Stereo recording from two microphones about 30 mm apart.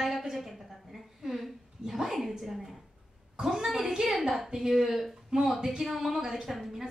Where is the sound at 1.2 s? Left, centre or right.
Centre.